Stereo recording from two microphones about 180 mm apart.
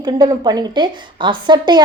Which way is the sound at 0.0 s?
25° right (ahead or behind).